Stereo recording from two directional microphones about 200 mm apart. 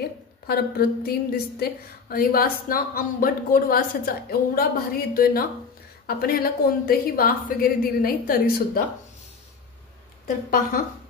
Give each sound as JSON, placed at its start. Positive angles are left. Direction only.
{"t": 0.5, "sound": "a woman's voice", "side_deg": 50}
{"t": 10.2, "sound": "a woman's voice", "side_deg": 45}